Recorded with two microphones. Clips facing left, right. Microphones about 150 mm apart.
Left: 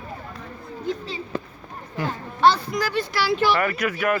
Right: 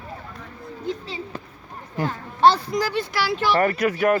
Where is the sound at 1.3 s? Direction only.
90° left.